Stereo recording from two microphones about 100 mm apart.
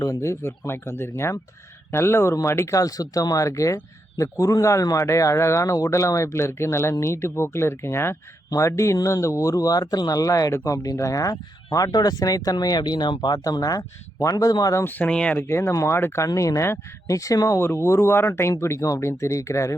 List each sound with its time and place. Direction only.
0.0 s speech: 30° left (ahead or behind)
14.8 s speech: 15° left (ahead or behind)
15.4 s speech: 25° left (ahead or behind)